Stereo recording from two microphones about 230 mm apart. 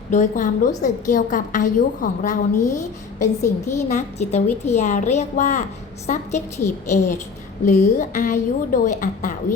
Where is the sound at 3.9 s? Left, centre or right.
Left.